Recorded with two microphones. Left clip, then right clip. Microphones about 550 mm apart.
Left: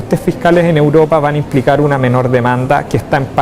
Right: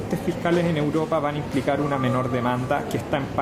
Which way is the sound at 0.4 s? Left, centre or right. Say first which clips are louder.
Left 14 dB; left.